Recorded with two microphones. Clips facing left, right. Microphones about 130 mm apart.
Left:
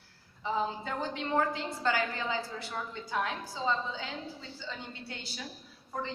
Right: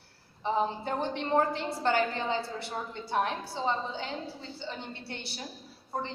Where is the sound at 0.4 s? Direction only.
25° right (ahead or behind).